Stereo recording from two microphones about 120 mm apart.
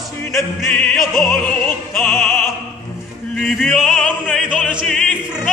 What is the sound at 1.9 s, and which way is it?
Opera, 15° left (ahead or behind).